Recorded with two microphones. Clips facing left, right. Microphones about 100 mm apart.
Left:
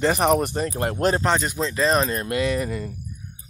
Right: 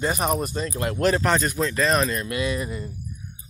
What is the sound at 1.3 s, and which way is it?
Speech, 20° left (ahead or behind).